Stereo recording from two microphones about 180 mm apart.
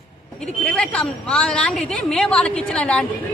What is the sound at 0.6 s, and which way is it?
A woman's voice, 5° left (ahead or behind).